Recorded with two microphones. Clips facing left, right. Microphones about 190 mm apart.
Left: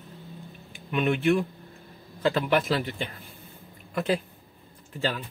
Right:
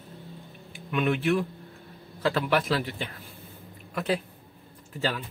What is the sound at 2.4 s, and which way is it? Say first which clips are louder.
Speech: left 1 dB; centre (ahead or behind).